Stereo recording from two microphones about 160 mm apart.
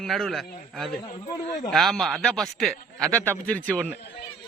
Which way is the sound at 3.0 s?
15° right (ahead or behind).